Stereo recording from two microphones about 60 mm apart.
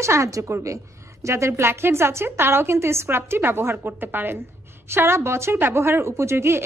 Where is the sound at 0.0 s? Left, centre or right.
Right.